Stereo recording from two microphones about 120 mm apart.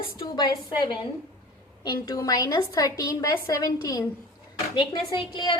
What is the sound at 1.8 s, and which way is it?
A woman's voice, 30° left (ahead or behind).